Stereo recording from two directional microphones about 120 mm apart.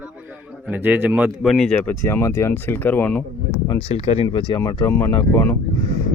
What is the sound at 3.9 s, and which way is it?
Speech, 60° left (ahead or behind).